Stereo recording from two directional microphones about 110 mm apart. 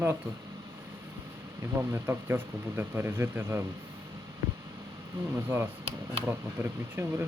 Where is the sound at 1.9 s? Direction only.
25° right (ahead or behind).